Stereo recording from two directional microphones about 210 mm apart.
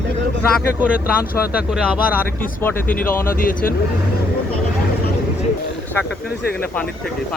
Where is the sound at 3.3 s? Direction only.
40° left (ahead or behind).